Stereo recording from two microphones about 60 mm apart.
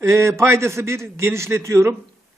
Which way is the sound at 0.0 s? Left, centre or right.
Right.